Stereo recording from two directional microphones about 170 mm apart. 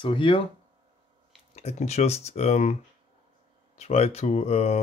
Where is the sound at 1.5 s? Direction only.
40° left (ahead or behind).